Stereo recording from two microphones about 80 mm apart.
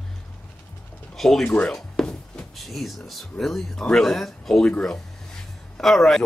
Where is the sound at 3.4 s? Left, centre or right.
Centre.